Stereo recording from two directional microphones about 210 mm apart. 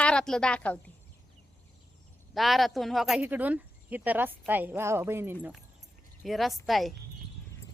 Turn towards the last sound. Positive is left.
turn(degrees=0)  # may be behind; listen again after turning